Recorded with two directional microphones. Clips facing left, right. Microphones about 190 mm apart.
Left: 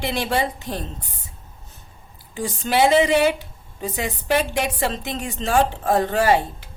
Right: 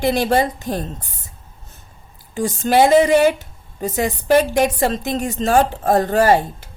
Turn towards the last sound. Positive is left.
turn(degrees=-45)  # may be behind; listen again after turning